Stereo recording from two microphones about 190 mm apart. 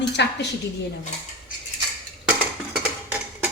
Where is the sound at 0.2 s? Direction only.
65° left (ahead or behind).